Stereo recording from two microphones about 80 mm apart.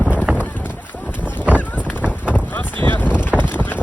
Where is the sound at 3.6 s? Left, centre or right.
Left.